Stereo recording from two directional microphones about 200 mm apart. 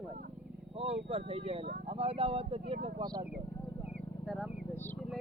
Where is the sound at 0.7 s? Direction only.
30° right (ahead or behind).